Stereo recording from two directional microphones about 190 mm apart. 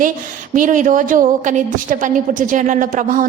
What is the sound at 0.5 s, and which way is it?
A woman's voice, 45° right (ahead or behind).